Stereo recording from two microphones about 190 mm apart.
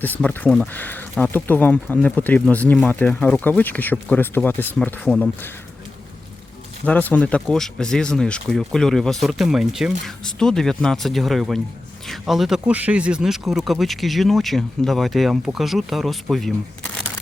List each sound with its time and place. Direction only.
0.2 s speech: 5° left (ahead or behind)
6.8 s speech: 10° left (ahead or behind)